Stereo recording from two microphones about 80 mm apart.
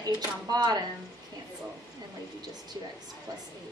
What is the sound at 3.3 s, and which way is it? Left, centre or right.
Speech, right.